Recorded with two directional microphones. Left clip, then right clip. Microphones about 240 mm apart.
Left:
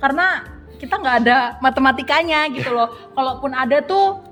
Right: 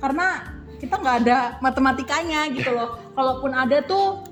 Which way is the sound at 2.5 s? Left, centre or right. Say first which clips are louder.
Left 2 dB; centre.